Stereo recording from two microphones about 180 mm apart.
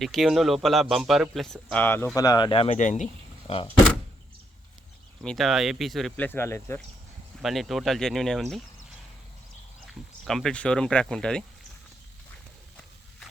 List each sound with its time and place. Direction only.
0.0 s speech: centre (ahead or behind); by 3.7 s 30° left (ahead or behind)
5.2 s speech: centre (ahead or behind)
7.4 s speech: centre (ahead or behind)
9.8 s speech: centre (ahead or behind)